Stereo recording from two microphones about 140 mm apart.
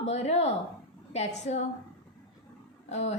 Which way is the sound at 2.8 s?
50° left (ahead or behind).